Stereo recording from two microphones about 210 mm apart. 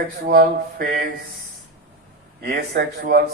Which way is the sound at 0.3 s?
45° right (ahead or behind).